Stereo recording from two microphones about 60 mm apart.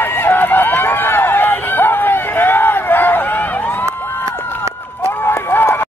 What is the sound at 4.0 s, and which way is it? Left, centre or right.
Crowd, left.